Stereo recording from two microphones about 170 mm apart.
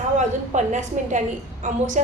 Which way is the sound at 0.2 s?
45° right (ahead or behind).